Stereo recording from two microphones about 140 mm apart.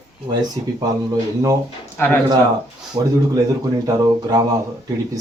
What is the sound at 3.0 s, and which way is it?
Speech, 35° right (ahead or behind).